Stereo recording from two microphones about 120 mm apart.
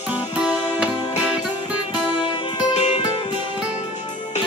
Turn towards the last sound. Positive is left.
turn(degrees=65)  # may be behind; listen again after turning